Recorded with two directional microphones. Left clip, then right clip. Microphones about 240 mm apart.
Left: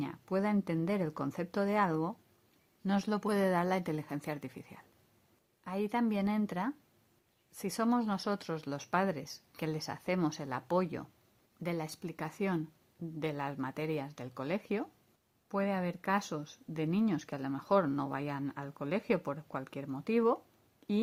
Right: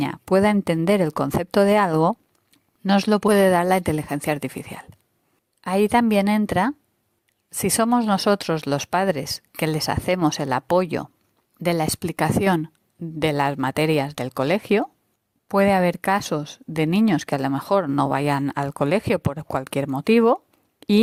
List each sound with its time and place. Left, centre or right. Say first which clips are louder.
0.0 s speech: right 16 dB; right